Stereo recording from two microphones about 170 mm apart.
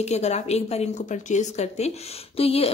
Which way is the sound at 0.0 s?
40° left (ahead or behind).